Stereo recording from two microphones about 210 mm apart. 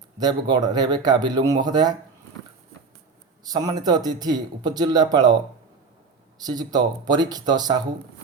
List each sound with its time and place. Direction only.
0.2 s a man's voice: 20° right (ahead or behind)
3.4 s a man's voice: 20° right (ahead or behind)
6.4 s a man's voice: 20° right (ahead or behind)